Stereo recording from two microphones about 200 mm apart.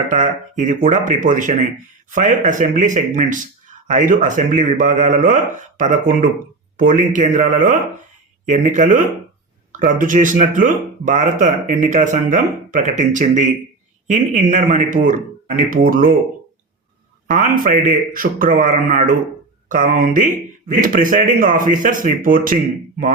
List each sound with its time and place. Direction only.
0.1 s speech: 40° right (ahead or behind)
17.3 s speech: 40° right (ahead or behind)